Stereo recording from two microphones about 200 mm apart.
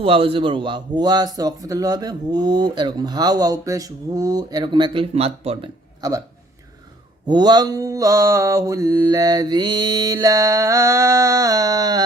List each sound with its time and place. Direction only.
0.0 s a man's voice: 25° right (ahead or behind)
6.0 s speech: 20° right (ahead or behind)
7.3 s mantra: 20° right (ahead or behind)